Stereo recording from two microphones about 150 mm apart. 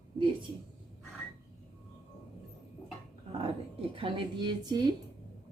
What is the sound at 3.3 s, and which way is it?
Speech, 35° right (ahead or behind).